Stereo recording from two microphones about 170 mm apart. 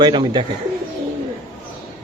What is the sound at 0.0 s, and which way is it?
Speech, 25° right (ahead or behind).